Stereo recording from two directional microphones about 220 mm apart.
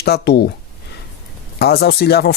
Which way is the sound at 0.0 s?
45° left (ahead or behind).